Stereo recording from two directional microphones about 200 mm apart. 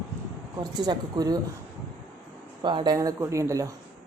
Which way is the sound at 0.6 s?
20° right (ahead or behind).